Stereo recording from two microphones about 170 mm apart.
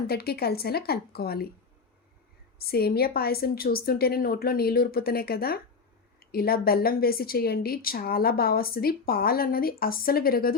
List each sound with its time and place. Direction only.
0.1 s speech: 65° left (ahead or behind)
2.6 s speech: 65° left (ahead or behind)